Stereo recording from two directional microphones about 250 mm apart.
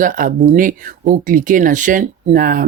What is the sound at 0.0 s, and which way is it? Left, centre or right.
Speech, right.